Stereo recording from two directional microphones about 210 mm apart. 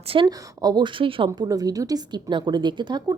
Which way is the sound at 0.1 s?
20° right (ahead or behind).